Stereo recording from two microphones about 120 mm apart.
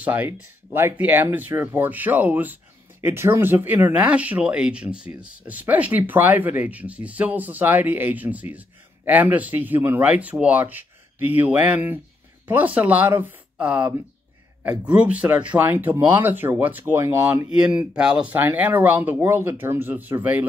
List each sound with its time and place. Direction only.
0.0 s speech: 15° right (ahead or behind)
17.5 s speech: 5° right (ahead or behind)